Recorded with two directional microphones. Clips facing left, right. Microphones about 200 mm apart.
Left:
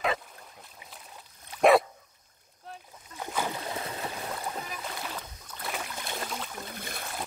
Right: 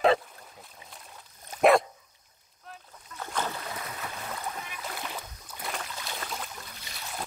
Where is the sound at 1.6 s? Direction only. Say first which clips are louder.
Even; centre (ahead or behind).